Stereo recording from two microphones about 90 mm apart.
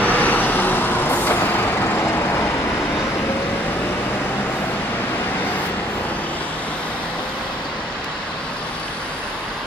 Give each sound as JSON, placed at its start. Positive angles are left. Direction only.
{"t": 0.0, "sound": "vehicle", "side_deg": 20}